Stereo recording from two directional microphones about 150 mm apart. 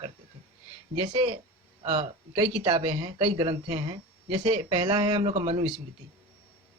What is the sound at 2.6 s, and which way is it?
Speech, 35° right (ahead or behind).